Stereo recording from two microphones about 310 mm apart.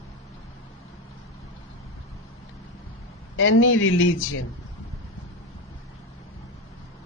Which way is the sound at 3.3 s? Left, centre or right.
Left.